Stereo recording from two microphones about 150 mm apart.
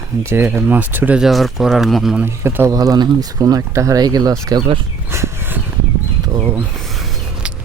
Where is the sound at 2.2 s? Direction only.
15° right (ahead or behind).